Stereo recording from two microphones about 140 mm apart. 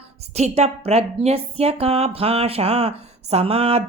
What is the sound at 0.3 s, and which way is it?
A woman's voice, 50° right (ahead or behind).